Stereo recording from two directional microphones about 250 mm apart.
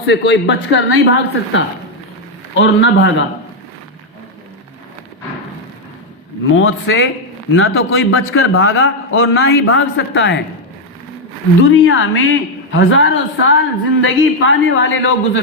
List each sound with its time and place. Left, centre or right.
0.0 s a woman's voice: left
6.6 s a woman's voice: left
11.7 s a woman's voice: left